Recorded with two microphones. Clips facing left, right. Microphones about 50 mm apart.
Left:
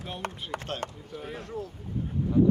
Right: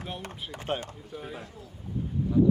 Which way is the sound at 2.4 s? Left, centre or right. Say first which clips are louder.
Even; left.